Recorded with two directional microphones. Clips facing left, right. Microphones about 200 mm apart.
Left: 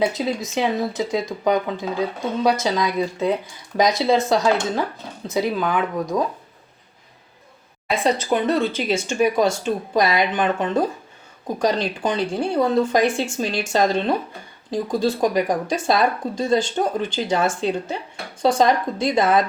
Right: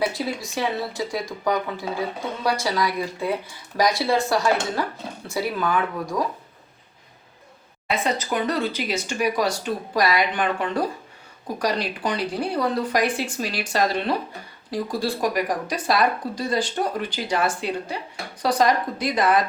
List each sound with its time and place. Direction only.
0.0 s speech: 20° left (ahead or behind)
7.9 s speech: 30° left (ahead or behind)